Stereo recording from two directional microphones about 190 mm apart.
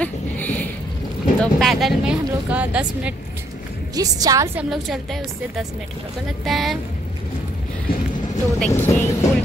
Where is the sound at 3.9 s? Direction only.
20° right (ahead or behind).